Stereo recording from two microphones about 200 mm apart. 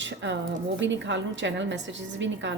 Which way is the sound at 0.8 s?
65° right (ahead or behind).